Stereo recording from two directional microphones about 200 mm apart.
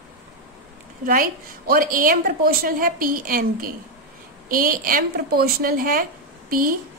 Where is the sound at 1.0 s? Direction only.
45° right (ahead or behind).